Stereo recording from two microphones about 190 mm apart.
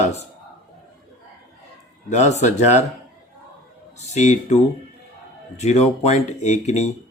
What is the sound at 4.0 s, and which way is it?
Speech, 35° left (ahead or behind).